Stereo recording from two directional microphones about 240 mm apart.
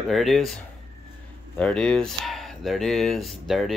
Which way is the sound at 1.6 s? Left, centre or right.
Centre.